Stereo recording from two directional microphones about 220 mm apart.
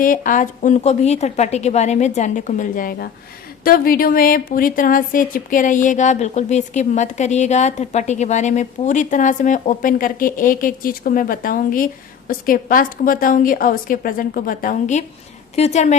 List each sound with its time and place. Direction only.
0.0 s a woman's voice: 40° left (ahead or behind)